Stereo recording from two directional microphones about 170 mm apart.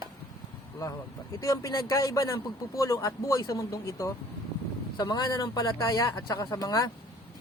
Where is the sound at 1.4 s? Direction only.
20° left (ahead or behind).